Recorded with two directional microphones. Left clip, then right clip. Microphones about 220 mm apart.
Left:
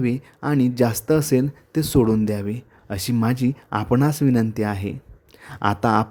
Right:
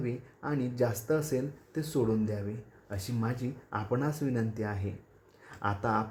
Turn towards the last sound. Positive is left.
turn(degrees=45)  # may be behind; listen again after turning